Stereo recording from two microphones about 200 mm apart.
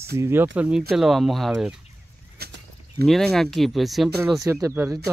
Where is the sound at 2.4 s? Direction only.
50° right (ahead or behind).